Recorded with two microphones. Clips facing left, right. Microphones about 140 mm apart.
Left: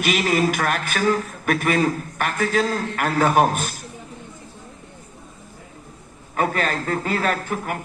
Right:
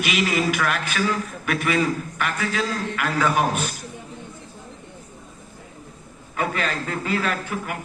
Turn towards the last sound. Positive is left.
turn(degrees=45)  # may be behind; listen again after turning